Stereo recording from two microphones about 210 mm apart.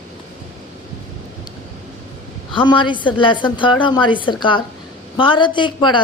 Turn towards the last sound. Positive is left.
turn(degrees=20)  # may be behind; listen again after turning